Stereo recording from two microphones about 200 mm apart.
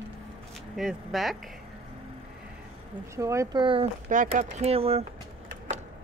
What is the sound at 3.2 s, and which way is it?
Speech, 15° right (ahead or behind).